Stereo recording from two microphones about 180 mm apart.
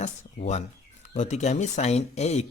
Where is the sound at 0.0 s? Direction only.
40° left (ahead or behind).